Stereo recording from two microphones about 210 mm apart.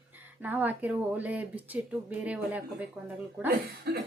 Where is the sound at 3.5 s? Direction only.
50° right (ahead or behind).